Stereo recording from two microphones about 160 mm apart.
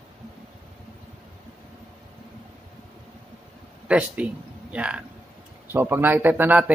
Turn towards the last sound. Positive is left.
turn(degrees=-10)  # may be behind; listen again after turning